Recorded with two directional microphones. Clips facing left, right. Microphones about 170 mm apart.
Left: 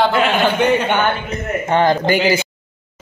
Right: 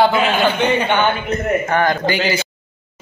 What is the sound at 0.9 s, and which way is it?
Speech, 10° left (ahead or behind).